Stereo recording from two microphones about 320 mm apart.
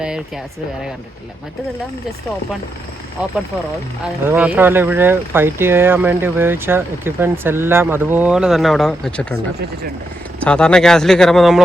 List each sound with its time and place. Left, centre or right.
4.3 s speech: centre
10.4 s speech: centre